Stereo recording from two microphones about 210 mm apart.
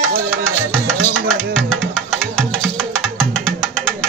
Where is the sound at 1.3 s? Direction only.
5° left (ahead or behind).